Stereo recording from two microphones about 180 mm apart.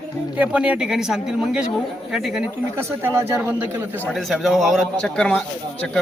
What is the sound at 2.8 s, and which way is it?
A man's voice, 15° right (ahead or behind).